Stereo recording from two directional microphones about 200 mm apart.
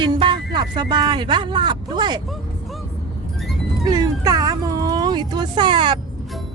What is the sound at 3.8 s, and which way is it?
Cat, 20° right (ahead or behind).